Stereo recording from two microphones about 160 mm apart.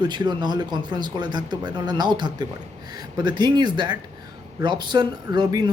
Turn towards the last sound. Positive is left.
turn(degrees=-25)  # may be behind; listen again after turning